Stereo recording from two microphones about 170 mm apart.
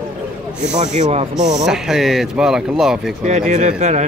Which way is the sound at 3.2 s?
45° right (ahead or behind).